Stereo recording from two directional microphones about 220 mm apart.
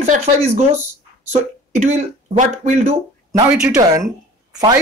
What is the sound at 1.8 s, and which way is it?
Speech, 30° right (ahead or behind).